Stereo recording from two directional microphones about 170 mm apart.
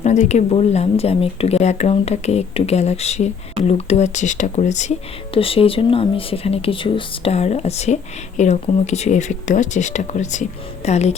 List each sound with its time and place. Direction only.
0.0 s speech: 45° left (ahead or behind)